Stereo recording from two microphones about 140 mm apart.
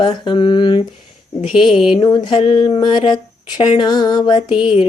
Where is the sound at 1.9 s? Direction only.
30° left (ahead or behind).